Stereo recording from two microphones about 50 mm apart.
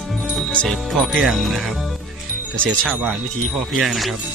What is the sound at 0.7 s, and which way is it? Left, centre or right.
Speech, centre.